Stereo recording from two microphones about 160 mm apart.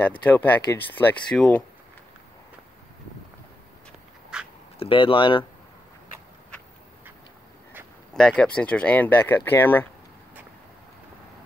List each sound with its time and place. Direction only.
0.3 s speech: 10° left (ahead or behind)
4.3 s a sound: 5° right (ahead or behind)
4.7 s speech: 35° left (ahead or behind)
8.1 s speech: 5° left (ahead or behind)